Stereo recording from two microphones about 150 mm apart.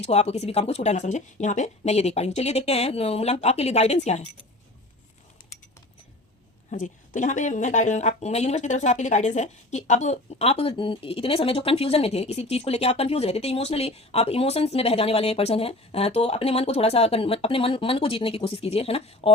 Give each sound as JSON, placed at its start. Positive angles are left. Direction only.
{"t": 0.0, "sound": "speech", "side_deg": 45}
{"t": 6.7, "sound": "speech", "side_deg": 60}